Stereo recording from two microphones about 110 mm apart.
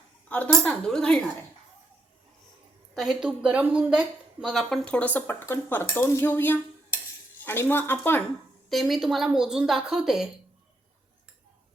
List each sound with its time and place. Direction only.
0.3 s speech: 15° left (ahead or behind)
2.9 s a woman's voice: centre (ahead or behind)
4.9 s speech: 15° left (ahead or behind)
8.7 s a woman's voice: centre (ahead or behind)